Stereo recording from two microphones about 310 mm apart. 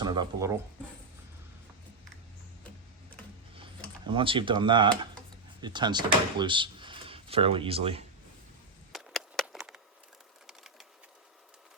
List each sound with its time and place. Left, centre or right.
0.0 s speech: centre
4.0 s speech: centre
8.9 s a sound: centre